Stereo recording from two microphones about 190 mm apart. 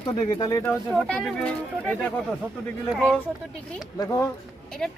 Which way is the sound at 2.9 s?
Centre (ahead or behind).